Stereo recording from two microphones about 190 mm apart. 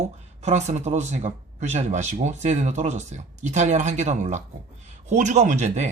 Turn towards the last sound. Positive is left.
turn(degrees=-40)  # may be behind; listen again after turning